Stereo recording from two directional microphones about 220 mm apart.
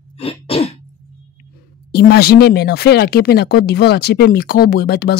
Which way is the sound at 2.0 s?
45° left (ahead or behind).